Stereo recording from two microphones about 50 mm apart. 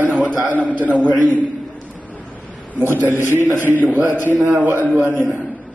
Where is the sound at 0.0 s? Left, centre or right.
Right.